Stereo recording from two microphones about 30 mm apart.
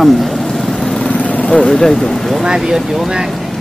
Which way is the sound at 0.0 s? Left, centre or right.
Centre.